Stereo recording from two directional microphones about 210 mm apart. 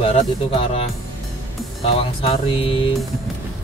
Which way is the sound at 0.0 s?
30° left (ahead or behind).